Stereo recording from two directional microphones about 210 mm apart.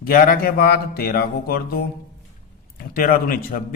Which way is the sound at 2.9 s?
45° left (ahead or behind).